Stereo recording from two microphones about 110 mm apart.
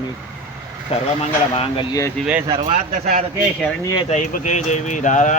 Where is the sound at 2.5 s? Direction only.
75° right (ahead or behind).